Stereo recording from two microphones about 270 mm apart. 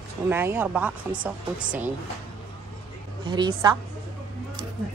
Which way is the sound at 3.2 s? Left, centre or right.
Centre.